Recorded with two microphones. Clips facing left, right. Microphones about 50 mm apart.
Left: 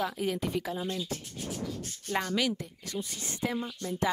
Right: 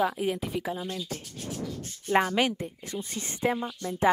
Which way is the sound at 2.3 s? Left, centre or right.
Right.